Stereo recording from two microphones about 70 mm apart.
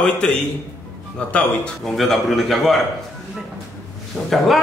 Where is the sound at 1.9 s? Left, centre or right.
Centre.